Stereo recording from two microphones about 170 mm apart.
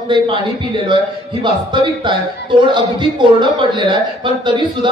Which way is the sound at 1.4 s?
30° right (ahead or behind).